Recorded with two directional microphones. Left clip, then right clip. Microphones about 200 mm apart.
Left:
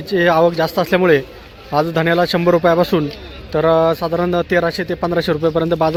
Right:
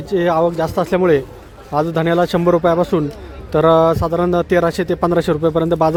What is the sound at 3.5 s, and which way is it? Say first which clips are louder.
Speech: right 2 dB; 20° right (ahead or behind).